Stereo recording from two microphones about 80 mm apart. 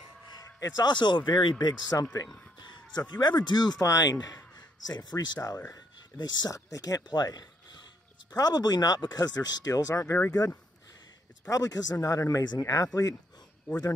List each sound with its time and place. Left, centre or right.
0.6 s speech: left
3.8 s speech: left
4.6 s speech: left
6.5 s speech: left